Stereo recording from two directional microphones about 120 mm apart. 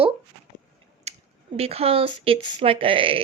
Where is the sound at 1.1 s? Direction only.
65° right (ahead or behind).